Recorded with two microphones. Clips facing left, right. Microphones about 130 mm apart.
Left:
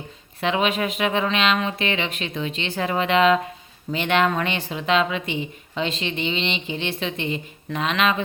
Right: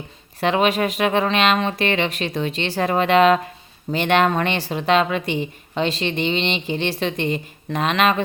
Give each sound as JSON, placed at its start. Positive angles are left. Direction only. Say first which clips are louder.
{"t": 0.3, "sound": "speech", "louder": "right 4 dB", "side_deg": -45}